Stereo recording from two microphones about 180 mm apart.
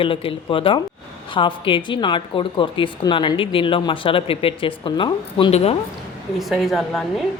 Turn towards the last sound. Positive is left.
turn(degrees=0)  # may be behind; listen again after turning